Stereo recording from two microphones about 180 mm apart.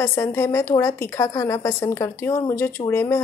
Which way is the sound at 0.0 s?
15° left (ahead or behind).